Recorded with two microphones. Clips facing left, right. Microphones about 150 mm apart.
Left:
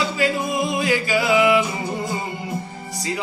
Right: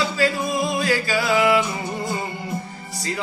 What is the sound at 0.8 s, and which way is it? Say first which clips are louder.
Music: left 1 dB; 15° left (ahead or behind).